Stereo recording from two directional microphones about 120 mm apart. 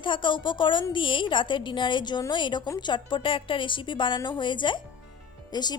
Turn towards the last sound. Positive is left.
turn(degrees=35)  # may be behind; listen again after turning